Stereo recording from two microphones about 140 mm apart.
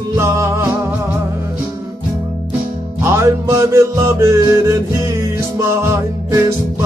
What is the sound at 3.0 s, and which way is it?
Music, 20° right (ahead or behind).